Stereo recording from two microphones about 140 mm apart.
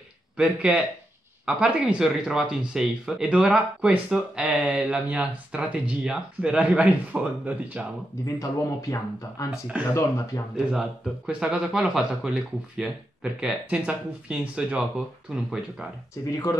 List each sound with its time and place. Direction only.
0.4 s speech: 10° right (ahead or behind)
8.4 s speech: 25° left (ahead or behind)
9.5 s speech: 5° right (ahead or behind)
9.9 s speech: 20° left (ahead or behind)
10.5 s speech: 5° right (ahead or behind)
16.3 s speech: 25° left (ahead or behind)